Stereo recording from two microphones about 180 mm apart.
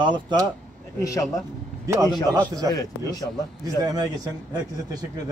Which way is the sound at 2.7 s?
20° left (ahead or behind).